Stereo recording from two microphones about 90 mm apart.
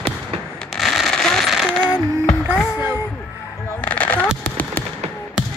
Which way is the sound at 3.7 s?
15° left (ahead or behind).